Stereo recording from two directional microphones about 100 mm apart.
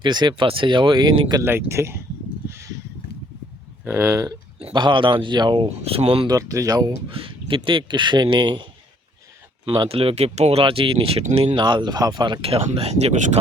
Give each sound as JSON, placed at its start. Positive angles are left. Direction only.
{"t": 0.0, "sound": "a man's voice", "side_deg": -45}
{"t": 0.4, "sound": "speech", "side_deg": -60}
{"t": 1.5, "sound": "speech", "side_deg": -25}
{"t": 2.5, "sound": "a sound", "side_deg": -30}
{"t": 3.8, "sound": "speech", "side_deg": -20}
{"t": 4.7, "sound": "a man's voice", "side_deg": -55}
{"t": 5.6, "sound": "speech", "side_deg": -85}
{"t": 6.2, "sound": "speech", "side_deg": -35}
{"t": 7.1, "sound": "speech", "side_deg": -60}
{"t": 9.9, "sound": "speech", "side_deg": -70}
{"t": 11.5, "sound": "a man's voice", "side_deg": -50}
{"t": 12.4, "sound": "speech", "side_deg": -70}